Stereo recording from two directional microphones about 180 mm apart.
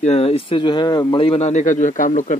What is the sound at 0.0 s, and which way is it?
Speech, 35° left (ahead or behind).